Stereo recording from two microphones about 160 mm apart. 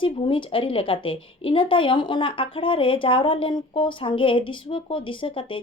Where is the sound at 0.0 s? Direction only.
30° left (ahead or behind).